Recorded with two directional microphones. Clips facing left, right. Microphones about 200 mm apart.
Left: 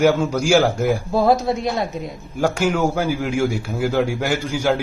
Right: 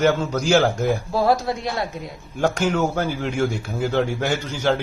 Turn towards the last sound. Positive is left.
turn(degrees=10)  # may be behind; listen again after turning